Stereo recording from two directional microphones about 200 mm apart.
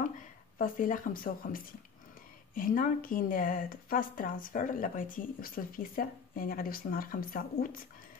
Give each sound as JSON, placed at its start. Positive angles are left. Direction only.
{"t": 0.6, "sound": "speech", "side_deg": 45}